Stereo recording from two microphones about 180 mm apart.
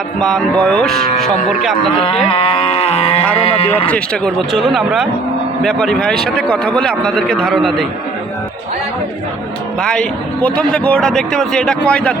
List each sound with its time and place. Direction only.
0.2 s a man's voice: 5° left (ahead or behind)
2.2 s livestock: 30° left (ahead or behind)
3.3 s speech: 35° left (ahead or behind)
3.8 s a man's voice: 5° left (ahead or behind)
9.8 s a man's voice: 5° left (ahead or behind)